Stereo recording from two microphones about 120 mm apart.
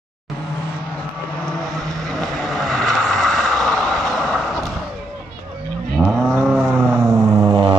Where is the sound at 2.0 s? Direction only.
Centre (ahead or behind).